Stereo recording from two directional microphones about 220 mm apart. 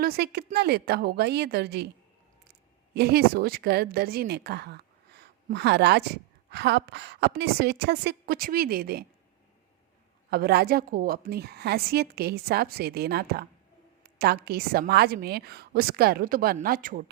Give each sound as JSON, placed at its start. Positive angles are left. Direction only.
{"t": 0.0, "sound": "a woman's voice", "side_deg": -45}
{"t": 2.9, "sound": "a woman's voice", "side_deg": -45}
{"t": 10.2, "sound": "a woman's voice", "side_deg": -45}